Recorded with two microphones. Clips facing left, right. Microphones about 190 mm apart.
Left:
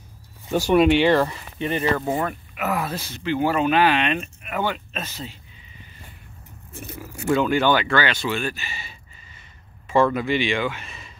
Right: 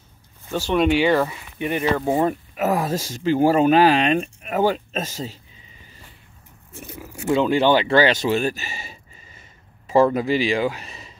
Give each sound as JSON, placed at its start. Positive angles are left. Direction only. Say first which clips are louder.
{"t": 0.5, "sound": "speech", "louder": "left 3 dB", "side_deg": 10}
{"t": 0.8, "sound": "speech", "louder": "left 1 dB", "side_deg": 0}
{"t": 1.7, "sound": "speech", "louder": "right 2 dB", "side_deg": -15}
{"t": 2.5, "sound": "speech", "louder": "right 4 dB", "side_deg": -40}
{"t": 6.7, "sound": "a sound", "louder": "left 1 dB", "side_deg": -20}
{"t": 7.2, "sound": "speech", "louder": "right 2 dB", "side_deg": -25}